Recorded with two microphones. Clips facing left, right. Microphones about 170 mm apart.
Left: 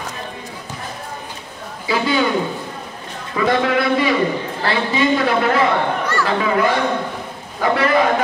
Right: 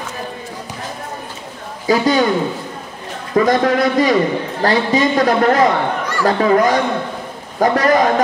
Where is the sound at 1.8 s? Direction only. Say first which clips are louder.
Right 5 dB; 40° right (ahead or behind).